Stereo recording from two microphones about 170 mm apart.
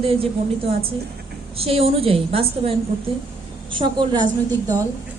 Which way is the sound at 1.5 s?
35° right (ahead or behind).